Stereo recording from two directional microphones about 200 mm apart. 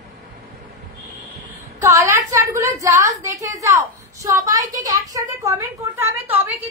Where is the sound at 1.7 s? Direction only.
15° right (ahead or behind).